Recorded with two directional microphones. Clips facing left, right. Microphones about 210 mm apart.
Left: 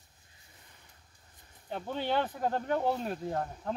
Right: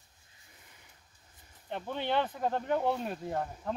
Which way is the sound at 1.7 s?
Centre (ahead or behind).